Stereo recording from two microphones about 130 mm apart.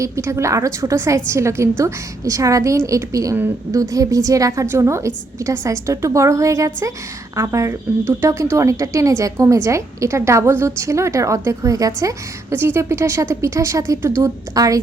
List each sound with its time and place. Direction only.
0.0 s speech: 20° right (ahead or behind)